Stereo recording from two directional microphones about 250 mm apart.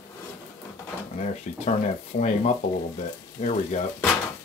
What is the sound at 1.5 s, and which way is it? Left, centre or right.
Speech, left.